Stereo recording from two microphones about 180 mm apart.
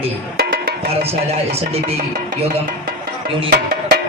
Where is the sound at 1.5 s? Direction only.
35° right (ahead or behind).